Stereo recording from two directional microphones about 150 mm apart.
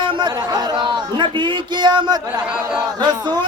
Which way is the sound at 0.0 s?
30° right (ahead or behind).